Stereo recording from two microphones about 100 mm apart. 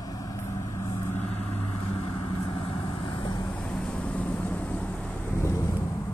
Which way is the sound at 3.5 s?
15° left (ahead or behind).